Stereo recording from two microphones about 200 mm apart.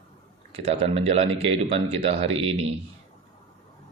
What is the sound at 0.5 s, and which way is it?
A man's voice, 30° right (ahead or behind).